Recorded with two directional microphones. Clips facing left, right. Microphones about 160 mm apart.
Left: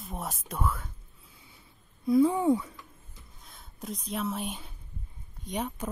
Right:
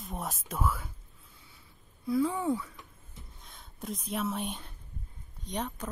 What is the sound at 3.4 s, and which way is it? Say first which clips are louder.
A woman's voice: even; centre (ahead or behind).